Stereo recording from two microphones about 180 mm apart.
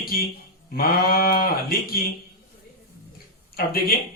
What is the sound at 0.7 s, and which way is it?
Speech, 55° left (ahead or behind).